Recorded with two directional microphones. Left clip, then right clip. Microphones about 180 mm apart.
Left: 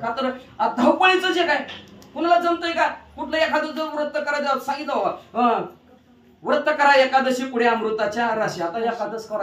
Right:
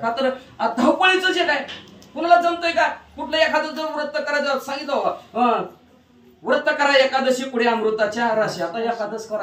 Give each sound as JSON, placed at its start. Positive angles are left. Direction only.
{"t": 0.1, "sound": "a man's voice", "side_deg": 10}